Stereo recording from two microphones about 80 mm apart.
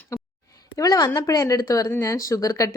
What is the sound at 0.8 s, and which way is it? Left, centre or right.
A woman's voice, left.